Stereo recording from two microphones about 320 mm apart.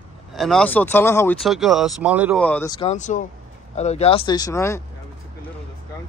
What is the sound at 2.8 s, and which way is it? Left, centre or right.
Speech, left.